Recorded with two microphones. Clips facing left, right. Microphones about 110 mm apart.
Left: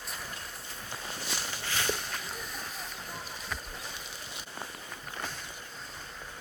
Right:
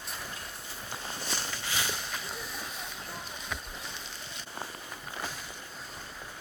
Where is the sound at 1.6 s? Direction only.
10° right (ahead or behind).